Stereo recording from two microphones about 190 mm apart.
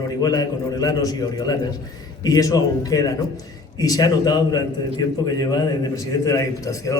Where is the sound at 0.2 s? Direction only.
20° left (ahead or behind).